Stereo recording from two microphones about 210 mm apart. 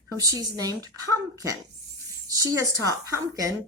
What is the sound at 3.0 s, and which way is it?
Speech, 15° right (ahead or behind).